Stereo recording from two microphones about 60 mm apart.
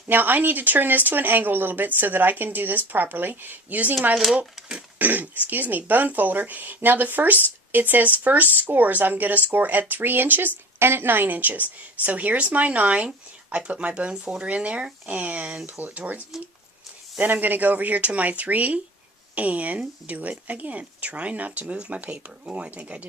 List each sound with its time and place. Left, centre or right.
0.1 s a woman's voice: right